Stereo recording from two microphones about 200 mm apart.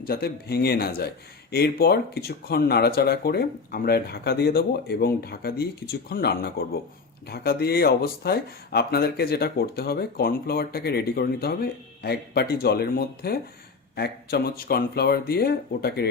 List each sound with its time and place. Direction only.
0.0 s a man's voice: 50° left (ahead or behind)